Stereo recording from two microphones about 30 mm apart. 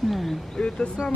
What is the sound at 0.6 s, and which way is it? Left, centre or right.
Speech, left.